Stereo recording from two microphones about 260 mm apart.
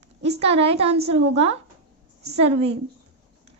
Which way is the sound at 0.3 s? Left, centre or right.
Right.